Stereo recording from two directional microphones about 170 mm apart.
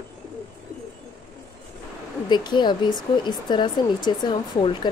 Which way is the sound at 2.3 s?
25° left (ahead or behind).